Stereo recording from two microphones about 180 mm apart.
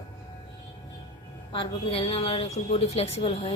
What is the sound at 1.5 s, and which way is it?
A woman's voice, 30° left (ahead or behind).